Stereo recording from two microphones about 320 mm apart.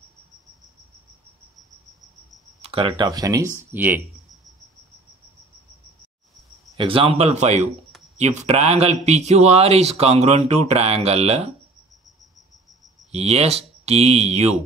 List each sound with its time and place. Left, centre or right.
2.6 s speech: centre
6.8 s speech: centre
13.1 s speech: centre